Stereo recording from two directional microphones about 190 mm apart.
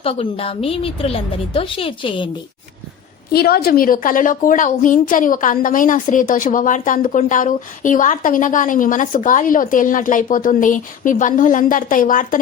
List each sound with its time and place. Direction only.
0.0 s a woman's voice: 30° left (ahead or behind)
3.3 s a woman's voice: 55° left (ahead or behind)